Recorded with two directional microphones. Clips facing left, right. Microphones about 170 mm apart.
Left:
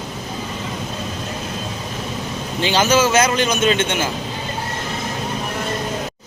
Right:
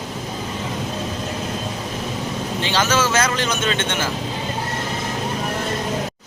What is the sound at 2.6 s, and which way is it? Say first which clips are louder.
A man's voice: left 5 dB; 20° left (ahead or behind).